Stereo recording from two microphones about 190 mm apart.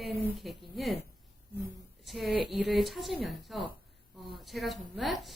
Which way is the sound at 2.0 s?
Centre (ahead or behind).